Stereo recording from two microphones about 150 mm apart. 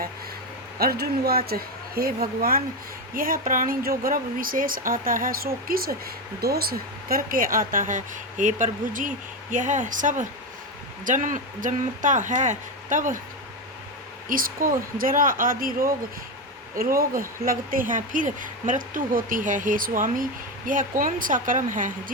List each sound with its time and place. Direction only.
0.8 s speech: 90° right
6.4 s speech: 90° right; by 13.1 s 60° right (ahead or behind)
14.3 s speech: 70° right (ahead or behind)